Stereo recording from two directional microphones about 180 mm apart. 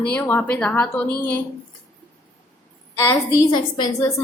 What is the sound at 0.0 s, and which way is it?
A woman's voice, 10° left (ahead or behind).